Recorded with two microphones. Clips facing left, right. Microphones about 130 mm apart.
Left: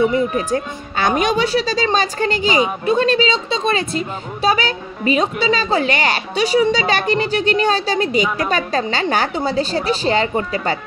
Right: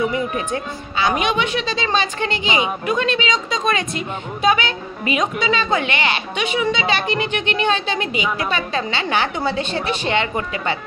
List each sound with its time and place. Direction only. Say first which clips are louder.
0.5 s speech: left 4 dB; 50° left (ahead or behind)
1.2 s a woman's voice: left 4 dB; 35° left (ahead or behind)